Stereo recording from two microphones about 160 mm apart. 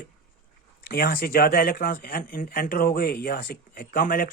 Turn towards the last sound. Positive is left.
turn(degrees=60)  # may be behind; listen again after turning